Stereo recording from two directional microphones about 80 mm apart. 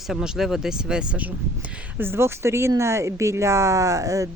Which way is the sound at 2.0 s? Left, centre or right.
Right.